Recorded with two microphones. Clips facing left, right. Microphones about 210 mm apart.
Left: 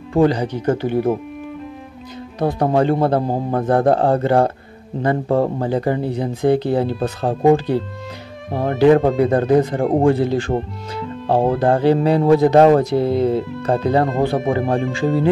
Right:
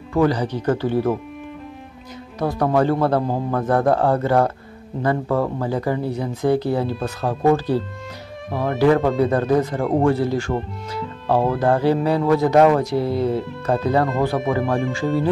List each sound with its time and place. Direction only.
0.1 s speech: 25° left (ahead or behind)
2.3 s speech: 25° left (ahead or behind)